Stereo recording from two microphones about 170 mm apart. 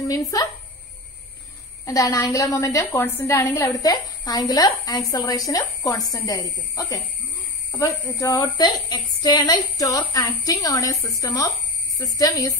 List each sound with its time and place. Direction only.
0.0 s speech: 20° left (ahead or behind)
1.9 s a woman's voice: 20° left (ahead or behind)